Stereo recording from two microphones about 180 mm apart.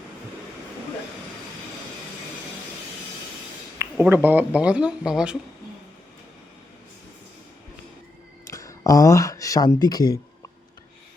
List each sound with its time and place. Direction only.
3.8 s speech: 10° right (ahead or behind)
8.5 s speech: 20° left (ahead or behind)